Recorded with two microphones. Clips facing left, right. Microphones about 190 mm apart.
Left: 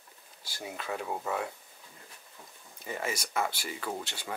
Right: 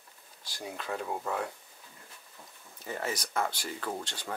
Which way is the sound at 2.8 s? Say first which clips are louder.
Even; 10° left (ahead or behind).